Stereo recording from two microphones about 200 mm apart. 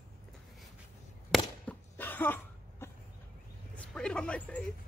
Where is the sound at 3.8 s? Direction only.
5° left (ahead or behind).